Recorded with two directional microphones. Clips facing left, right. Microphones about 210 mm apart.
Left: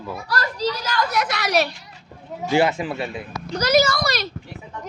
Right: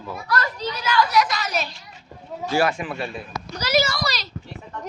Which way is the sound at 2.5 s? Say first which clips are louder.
Left 3 dB; 20° left (ahead or behind).